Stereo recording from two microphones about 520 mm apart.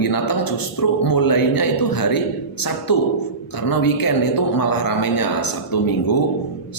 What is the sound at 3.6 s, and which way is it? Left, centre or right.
Speech, left.